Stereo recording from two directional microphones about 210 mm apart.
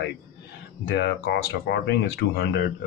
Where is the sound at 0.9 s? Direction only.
55° left (ahead or behind).